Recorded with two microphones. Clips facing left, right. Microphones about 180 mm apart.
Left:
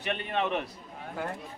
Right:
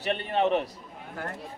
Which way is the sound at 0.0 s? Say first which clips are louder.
Right 4 dB; 35° right (ahead or behind).